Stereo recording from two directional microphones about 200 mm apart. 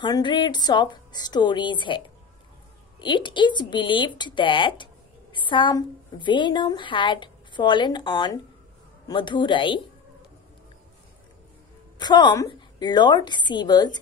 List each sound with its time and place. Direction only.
0.0 s a woman's voice: 20° left (ahead or behind)
12.0 s a woman's voice: 20° left (ahead or behind)